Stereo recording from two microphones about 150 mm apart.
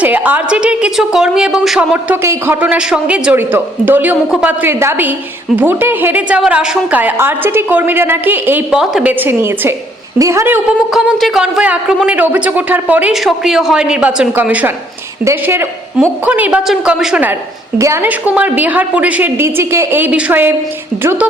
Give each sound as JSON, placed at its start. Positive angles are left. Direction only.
{"t": 0.0, "sound": "a woman's voice", "side_deg": -10}
{"t": 10.9, "sound": "a woman's voice", "side_deg": -5}
{"t": 17.7, "sound": "a woman's voice", "side_deg": -20}